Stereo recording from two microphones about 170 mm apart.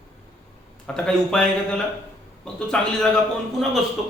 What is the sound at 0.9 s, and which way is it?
Speech, 5° left (ahead or behind).